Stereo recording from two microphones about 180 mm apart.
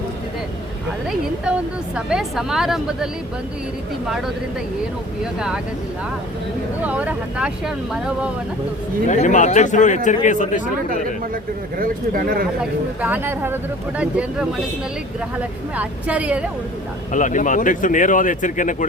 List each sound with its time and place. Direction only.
2.0 s speech: 5° right (ahead or behind)
5.2 s speech: 5° right (ahead or behind)
6.8 s speech: 5° right (ahead or behind)
9.0 s speech: 40° left (ahead or behind)
11.8 s speech: 55° right (ahead or behind)
13.0 s speech: 10° right (ahead or behind)
17.1 s speech: 45° left (ahead or behind)